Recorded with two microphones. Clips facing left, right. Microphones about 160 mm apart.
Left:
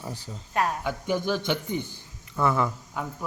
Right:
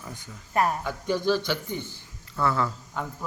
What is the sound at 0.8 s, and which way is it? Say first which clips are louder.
A man's voice: right 1 dB; 15° left (ahead or behind).